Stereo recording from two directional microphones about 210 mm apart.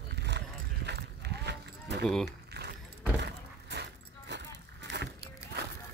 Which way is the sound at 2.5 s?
50° right (ahead or behind).